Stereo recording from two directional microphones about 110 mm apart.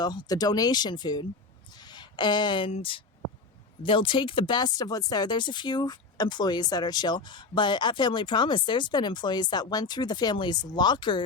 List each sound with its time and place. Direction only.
0.0 s speech: 35° left (ahead or behind)